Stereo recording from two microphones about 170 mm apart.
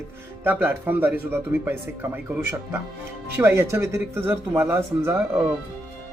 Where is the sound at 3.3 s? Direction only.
15° right (ahead or behind).